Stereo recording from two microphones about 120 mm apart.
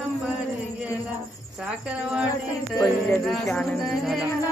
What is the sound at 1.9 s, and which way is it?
Speech, 10° right (ahead or behind).